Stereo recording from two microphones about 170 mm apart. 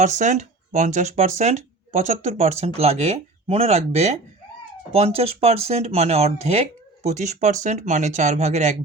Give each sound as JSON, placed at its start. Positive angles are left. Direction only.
{"t": 0.0, "sound": "speech", "side_deg": -45}